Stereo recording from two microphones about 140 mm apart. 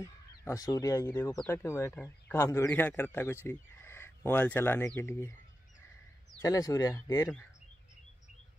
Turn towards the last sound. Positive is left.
turn(degrees=25)  # may be behind; listen again after turning